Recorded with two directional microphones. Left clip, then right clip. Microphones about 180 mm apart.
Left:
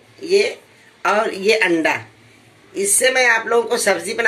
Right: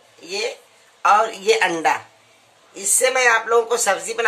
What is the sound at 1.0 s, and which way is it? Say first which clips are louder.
A woman's voice: right 2 dB; 75° right (ahead or behind).